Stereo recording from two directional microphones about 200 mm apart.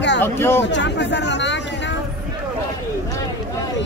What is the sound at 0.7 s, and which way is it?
Chatter, 65° left (ahead or behind).